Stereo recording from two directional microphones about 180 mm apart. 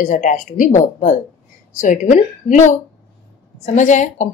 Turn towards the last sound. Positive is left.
turn(degrees=45)  # may be behind; listen again after turning